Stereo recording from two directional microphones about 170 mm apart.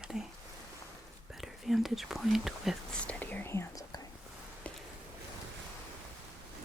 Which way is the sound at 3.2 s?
10° left (ahead or behind).